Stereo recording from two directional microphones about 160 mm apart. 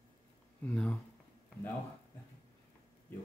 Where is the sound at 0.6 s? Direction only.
5° left (ahead or behind).